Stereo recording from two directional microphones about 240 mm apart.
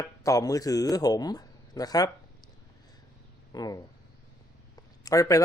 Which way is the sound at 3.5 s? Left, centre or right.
Centre.